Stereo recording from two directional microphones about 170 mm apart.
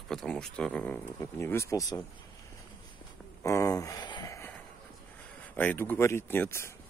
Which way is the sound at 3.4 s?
20° left (ahead or behind).